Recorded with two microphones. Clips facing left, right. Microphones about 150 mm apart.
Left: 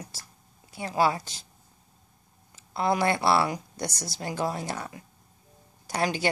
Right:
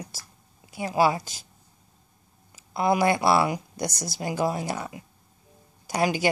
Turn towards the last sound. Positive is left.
turn(degrees=-10)  # may be behind; listen again after turning